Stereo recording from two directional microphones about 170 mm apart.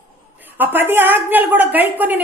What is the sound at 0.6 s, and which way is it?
A woman's voice, 10° right (ahead or behind).